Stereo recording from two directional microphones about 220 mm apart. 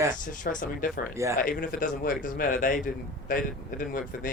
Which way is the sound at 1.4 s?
40° left (ahead or behind).